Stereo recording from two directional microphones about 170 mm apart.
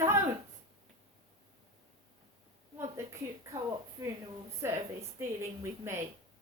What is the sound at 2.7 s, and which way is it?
Speech, 15° right (ahead or behind).